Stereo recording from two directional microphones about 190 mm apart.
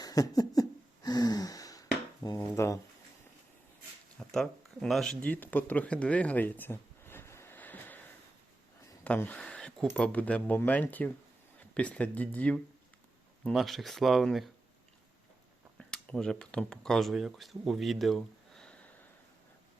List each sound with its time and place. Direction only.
0.0 s a sound: 20° left (ahead or behind)
2.2 s speech: 15° left (ahead or behind)
4.2 s speech: centre (ahead or behind)
9.0 s a sound: 10° left (ahead or behind)
9.9 s speech: 5° left (ahead or behind)
15.9 s speech: 5° left (ahead or behind)